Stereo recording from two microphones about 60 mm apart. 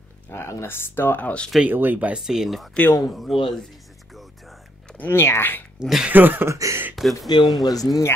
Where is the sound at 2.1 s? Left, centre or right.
Centre.